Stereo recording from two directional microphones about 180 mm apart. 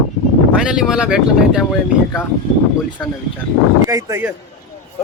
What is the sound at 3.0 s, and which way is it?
Speech, 5° left (ahead or behind).